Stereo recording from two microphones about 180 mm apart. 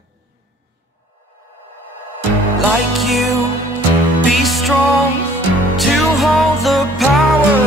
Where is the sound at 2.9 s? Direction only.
Centre (ahead or behind).